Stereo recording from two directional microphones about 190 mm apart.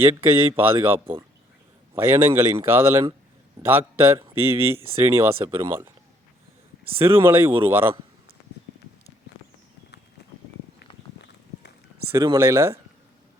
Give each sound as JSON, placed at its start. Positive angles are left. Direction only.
{"t": 0.0, "sound": "speech", "side_deg": -15}
{"t": 7.3, "sound": "speech", "side_deg": -10}
{"t": 12.1, "sound": "speech", "side_deg": -20}